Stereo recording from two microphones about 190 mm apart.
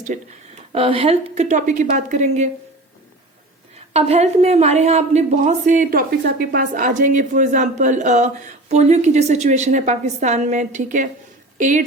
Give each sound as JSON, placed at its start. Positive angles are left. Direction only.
{"t": 0.1, "sound": "a woman's voice", "side_deg": -35}
{"t": 3.9, "sound": "a woman's voice", "side_deg": -35}